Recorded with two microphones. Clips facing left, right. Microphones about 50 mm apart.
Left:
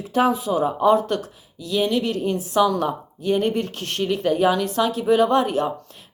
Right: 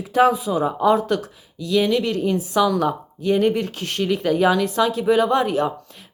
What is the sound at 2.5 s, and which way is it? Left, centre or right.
A woman's voice, right.